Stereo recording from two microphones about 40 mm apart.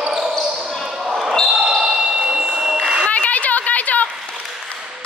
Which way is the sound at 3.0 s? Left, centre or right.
Left.